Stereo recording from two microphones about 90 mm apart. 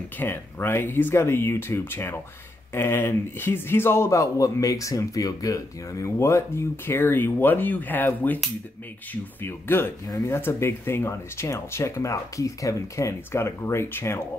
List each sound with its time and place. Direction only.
0.2 s a man's voice: 25° left (ahead or behind)